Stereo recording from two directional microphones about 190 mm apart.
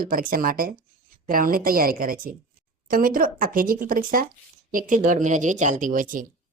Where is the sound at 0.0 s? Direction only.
45° right (ahead or behind).